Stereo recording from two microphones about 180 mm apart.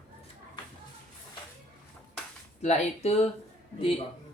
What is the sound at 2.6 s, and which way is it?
Speech, 35° left (ahead or behind).